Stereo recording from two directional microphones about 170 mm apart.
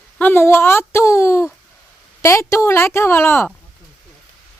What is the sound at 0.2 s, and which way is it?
Speech, 10° left (ahead or behind).